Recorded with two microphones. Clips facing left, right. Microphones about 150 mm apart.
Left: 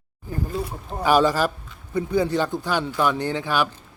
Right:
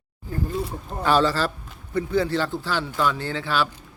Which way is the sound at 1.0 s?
15° left (ahead or behind).